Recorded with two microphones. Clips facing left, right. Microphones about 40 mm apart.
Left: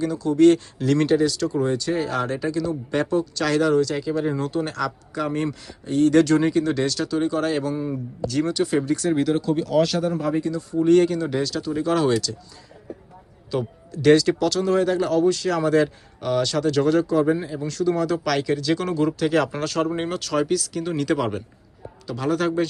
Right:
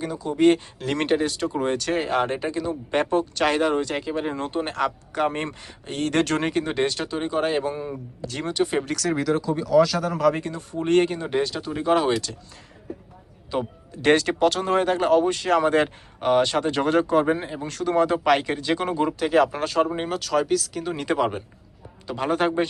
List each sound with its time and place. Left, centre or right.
0.0 s speech: centre
0.9 s speech: right
1.6 s speech: right
2.0 s speech: right
6.7 s speech: right
10.2 s a man's voice: right
10.4 s speech: right
13.5 s speech: right
14.1 s speech: right
19.2 s speech: centre
20.9 s speech: centre
22.0 s speech: right